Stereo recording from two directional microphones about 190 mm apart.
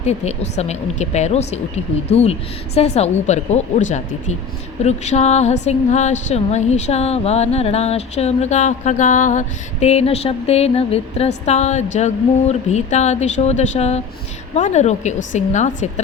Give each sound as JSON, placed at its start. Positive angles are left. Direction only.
{"t": 0.0, "sound": "a woman's voice", "side_deg": 35}